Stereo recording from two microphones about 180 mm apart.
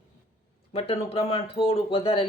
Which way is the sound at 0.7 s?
35° left (ahead or behind).